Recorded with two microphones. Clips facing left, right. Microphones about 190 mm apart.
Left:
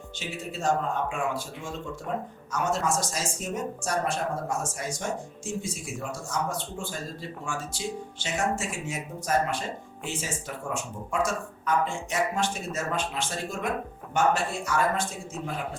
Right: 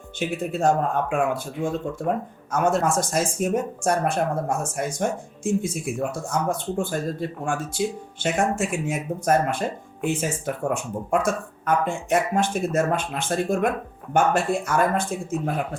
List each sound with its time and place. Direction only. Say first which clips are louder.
0.2 s speech: right 10 dB; 55° right (ahead or behind)